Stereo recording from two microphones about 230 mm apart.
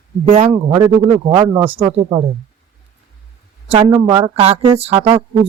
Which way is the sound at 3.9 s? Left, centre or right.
Centre.